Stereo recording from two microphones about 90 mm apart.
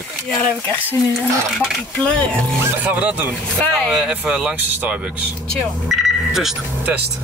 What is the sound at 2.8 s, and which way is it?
Speech, 15° right (ahead or behind).